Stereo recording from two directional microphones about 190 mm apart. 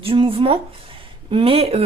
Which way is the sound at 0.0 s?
30° right (ahead or behind).